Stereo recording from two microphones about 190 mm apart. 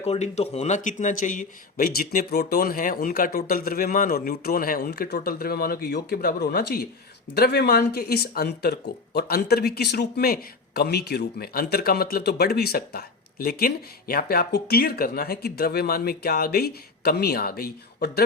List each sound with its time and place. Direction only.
0.0 s speech: 35° left (ahead or behind); by 18.2 s 55° left (ahead or behind)